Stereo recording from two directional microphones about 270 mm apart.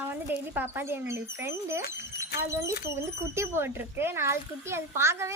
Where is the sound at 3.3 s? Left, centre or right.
Centre.